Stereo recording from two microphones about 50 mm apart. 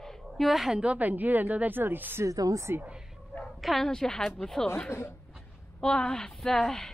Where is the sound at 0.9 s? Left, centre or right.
Right.